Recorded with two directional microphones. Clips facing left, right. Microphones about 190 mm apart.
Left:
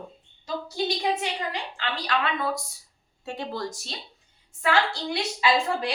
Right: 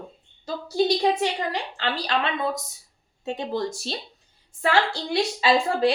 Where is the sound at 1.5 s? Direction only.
35° right (ahead or behind).